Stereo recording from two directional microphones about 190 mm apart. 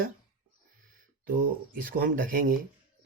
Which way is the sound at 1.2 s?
45° right (ahead or behind).